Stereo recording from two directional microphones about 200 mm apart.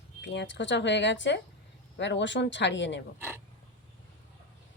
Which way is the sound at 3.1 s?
10° right (ahead or behind).